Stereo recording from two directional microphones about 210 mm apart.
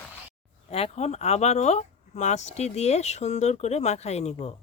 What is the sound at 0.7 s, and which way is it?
Speech, 30° left (ahead or behind).